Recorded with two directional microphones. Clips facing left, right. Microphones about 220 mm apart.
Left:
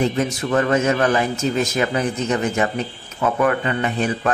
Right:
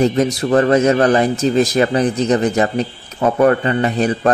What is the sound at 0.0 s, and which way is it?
A man's voice, 35° right (ahead or behind).